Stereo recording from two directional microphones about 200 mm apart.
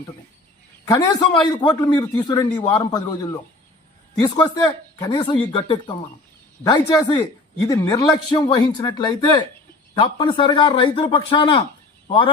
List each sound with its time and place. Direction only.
0.9 s a man's voice: 20° left (ahead or behind)
4.2 s a man's voice: 20° left (ahead or behind)